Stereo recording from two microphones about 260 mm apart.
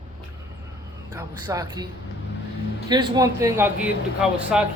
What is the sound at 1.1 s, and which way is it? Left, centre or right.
Speech, centre.